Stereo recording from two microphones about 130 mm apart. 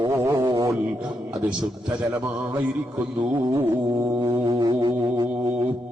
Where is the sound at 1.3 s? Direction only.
5° right (ahead or behind).